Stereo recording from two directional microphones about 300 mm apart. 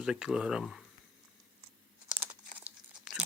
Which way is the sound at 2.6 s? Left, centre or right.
Centre.